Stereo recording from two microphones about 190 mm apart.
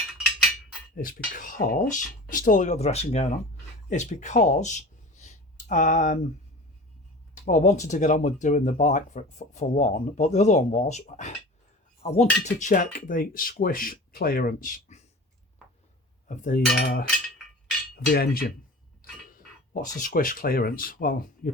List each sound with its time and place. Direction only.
0.9 s speech: 45° left (ahead or behind)
7.4 s speech: 40° left (ahead or behind)
16.3 s speech: 45° left (ahead or behind)
18.1 s speech: 50° left (ahead or behind)
19.7 s speech: 45° left (ahead or behind)